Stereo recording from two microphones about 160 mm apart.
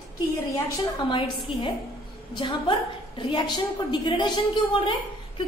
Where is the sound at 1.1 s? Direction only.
30° left (ahead or behind).